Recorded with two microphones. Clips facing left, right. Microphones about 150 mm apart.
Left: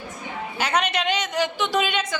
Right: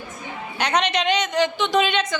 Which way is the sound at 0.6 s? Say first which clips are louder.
Right 2 dB; 5° left (ahead or behind).